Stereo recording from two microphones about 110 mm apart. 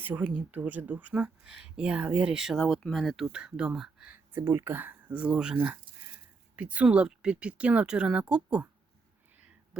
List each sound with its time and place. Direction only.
0.0 s speech: 15° right (ahead or behind); by 3.2 s centre (ahead or behind)
3.3 s speech: 10° right (ahead or behind)
4.3 s speech: 20° right (ahead or behind)